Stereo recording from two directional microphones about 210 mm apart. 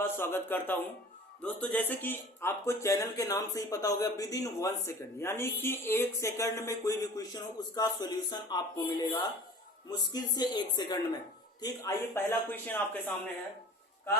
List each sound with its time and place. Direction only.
0.0 s a man's voice: 10° left (ahead or behind)